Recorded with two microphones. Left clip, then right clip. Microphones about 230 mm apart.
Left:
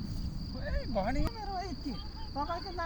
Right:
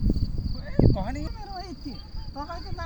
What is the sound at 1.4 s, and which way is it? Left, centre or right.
Cricket, centre.